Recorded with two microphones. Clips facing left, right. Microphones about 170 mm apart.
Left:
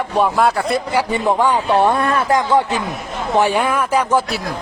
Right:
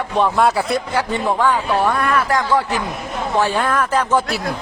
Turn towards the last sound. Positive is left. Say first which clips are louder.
# left 1 dB
turn(degrees=10)  # may be behind; listen again after turning